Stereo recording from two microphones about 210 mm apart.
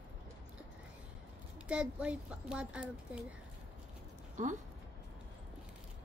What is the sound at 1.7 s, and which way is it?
Speech, 5° right (ahead or behind).